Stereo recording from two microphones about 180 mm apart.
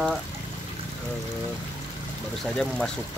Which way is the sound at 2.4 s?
5° left (ahead or behind).